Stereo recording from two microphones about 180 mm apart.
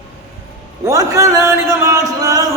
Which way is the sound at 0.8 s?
20° right (ahead or behind).